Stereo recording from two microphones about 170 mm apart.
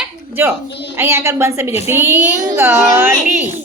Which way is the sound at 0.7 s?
90° left.